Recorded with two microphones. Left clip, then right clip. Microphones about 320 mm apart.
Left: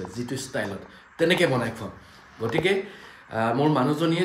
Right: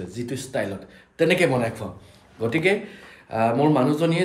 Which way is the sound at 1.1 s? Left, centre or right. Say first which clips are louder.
Right 2 dB; centre.